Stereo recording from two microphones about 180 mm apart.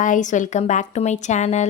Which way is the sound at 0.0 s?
45° left (ahead or behind).